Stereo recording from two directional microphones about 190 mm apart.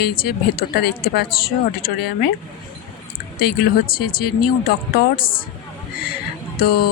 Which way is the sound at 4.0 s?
50° left (ahead or behind).